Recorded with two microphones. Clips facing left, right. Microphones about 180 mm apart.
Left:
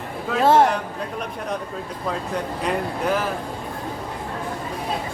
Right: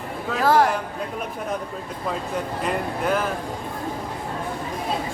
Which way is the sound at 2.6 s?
Centre (ahead or behind).